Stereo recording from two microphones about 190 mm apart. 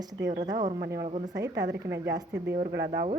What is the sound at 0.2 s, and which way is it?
Speech, 65° right (ahead or behind).